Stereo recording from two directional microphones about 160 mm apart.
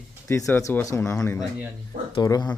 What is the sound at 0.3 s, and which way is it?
Speech, 20° left (ahead or behind).